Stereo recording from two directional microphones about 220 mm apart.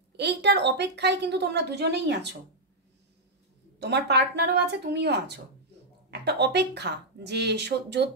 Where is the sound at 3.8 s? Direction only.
50° right (ahead or behind).